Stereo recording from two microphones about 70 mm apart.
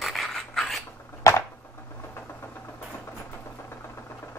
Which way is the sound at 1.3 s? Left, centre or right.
Left.